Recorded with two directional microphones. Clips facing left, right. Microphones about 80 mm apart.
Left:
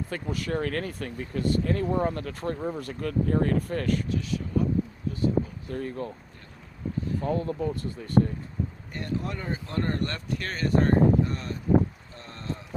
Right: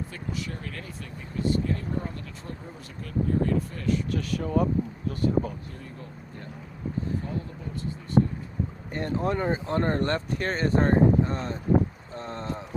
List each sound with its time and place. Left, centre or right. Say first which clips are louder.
0.1 s speech: left 5 dB; left
4.1 s speech: right 2 dB; right
5.7 s speech: left 10 dB; left
7.3 s speech: left 8 dB; left
9.0 s speech: right 5 dB; right
12.1 s boat: right 4 dB; right